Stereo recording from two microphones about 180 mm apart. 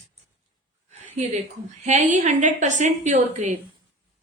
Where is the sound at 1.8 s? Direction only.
40° right (ahead or behind).